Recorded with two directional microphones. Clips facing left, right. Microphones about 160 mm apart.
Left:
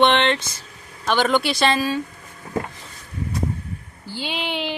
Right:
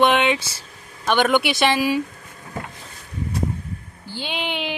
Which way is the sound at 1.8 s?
10° right (ahead or behind).